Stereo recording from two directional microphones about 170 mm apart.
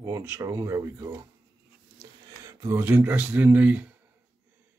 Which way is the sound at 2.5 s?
20° right (ahead or behind).